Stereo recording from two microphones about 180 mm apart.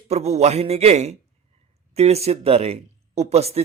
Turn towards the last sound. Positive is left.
turn(degrees=-35)  # may be behind; listen again after turning